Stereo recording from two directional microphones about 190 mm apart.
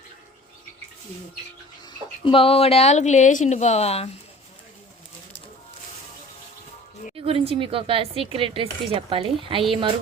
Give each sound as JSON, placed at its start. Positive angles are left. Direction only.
{"t": 2.2, "sound": "speech", "side_deg": 30}
{"t": 7.2, "sound": "speech", "side_deg": -30}